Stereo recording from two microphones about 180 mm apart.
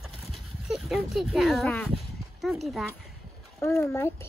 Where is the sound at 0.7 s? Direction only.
5° right (ahead or behind).